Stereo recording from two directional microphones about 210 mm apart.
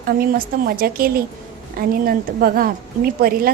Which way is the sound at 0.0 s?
45° right (ahead or behind).